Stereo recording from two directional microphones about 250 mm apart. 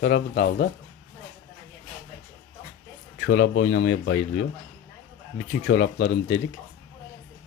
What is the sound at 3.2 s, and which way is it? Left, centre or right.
Speech, left.